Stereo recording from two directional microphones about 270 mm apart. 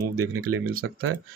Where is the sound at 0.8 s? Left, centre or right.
Right.